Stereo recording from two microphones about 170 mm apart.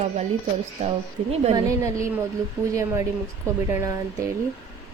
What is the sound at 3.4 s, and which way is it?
Speech, 15° right (ahead or behind).